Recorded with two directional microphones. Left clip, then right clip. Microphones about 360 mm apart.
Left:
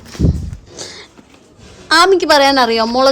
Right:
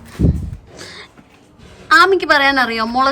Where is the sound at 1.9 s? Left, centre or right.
Centre.